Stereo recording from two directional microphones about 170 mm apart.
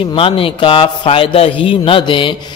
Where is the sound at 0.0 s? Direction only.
30° left (ahead or behind).